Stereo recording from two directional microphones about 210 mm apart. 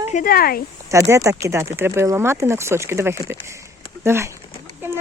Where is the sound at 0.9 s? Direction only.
15° right (ahead or behind).